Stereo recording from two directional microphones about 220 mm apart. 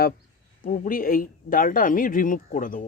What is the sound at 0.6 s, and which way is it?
Speech, 40° left (ahead or behind).